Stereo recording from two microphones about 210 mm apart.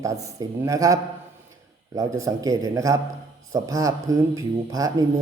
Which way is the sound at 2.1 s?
15° right (ahead or behind).